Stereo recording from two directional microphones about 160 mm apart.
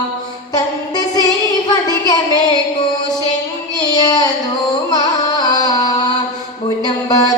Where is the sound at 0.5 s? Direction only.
25° left (ahead or behind).